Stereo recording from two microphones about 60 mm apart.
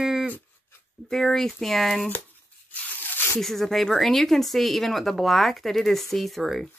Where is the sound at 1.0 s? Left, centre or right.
Centre.